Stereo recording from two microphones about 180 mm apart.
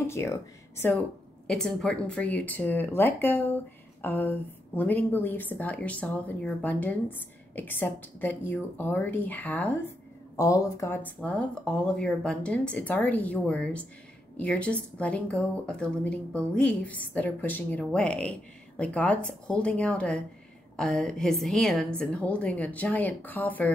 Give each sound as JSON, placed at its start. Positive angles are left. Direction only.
{"t": 0.0, "sound": "speech", "side_deg": 15}
{"t": 1.5, "sound": "a woman's voice", "side_deg": 5}